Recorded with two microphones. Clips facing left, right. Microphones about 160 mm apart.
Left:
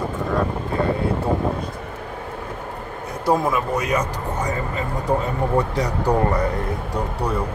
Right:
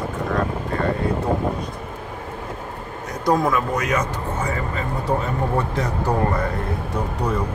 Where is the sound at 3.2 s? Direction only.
10° left (ahead or behind).